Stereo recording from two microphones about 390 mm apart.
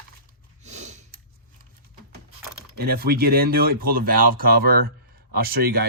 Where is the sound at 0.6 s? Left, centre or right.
Centre.